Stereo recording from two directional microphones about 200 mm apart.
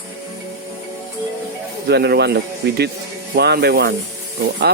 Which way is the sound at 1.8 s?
55° right (ahead or behind).